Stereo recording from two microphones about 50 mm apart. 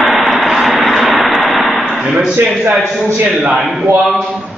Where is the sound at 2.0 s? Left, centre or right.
Centre.